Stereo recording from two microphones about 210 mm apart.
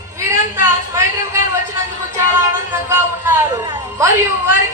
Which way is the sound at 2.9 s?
10° right (ahead or behind).